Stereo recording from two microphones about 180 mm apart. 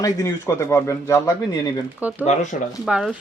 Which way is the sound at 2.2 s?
40° left (ahead or behind).